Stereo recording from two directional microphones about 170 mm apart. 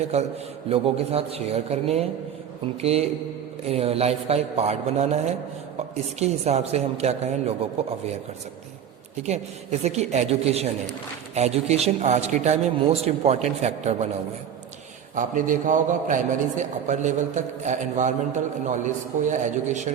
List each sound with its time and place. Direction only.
0.0 s speech: 40° right (ahead or behind)
9.8 s speech: 40° right (ahead or behind)
15.1 s a man's voice: 50° right (ahead or behind)